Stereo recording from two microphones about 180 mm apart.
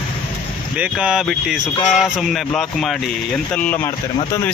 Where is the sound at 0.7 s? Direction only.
5° right (ahead or behind).